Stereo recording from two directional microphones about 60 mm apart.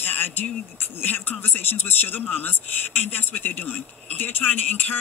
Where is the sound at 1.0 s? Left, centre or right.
Left.